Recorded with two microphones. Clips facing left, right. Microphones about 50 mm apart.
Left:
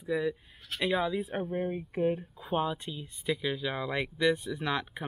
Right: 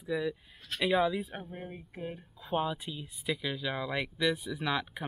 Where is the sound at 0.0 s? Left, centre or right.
Centre.